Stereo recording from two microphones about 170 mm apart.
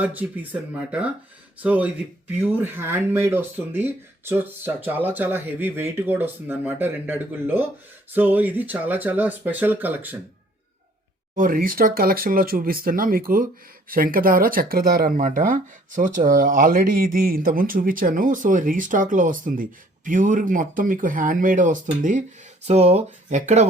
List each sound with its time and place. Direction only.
0.0 s speech: 10° right (ahead or behind)
11.3 s speech: 55° right (ahead or behind)
22.6 s speech: 40° right (ahead or behind)